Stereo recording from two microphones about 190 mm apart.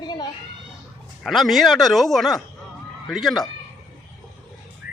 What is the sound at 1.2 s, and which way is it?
Speech, centre (ahead or behind).